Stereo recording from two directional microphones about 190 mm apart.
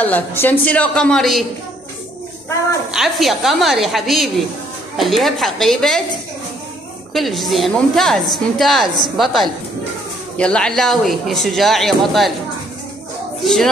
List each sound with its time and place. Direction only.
0.0 s a woman's voice: 10° left (ahead or behind)
2.9 s a woman's voice: centre (ahead or behind)
7.2 s a woman's voice: centre (ahead or behind)
13.4 s speech: centre (ahead or behind)